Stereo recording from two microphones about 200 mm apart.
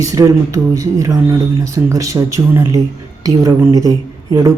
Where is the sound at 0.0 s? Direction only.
15° right (ahead or behind).